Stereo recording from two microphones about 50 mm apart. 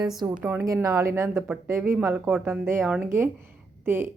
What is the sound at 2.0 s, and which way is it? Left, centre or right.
A woman's voice, right.